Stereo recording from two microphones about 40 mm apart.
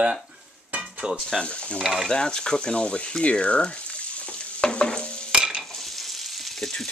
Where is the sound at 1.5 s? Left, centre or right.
Left.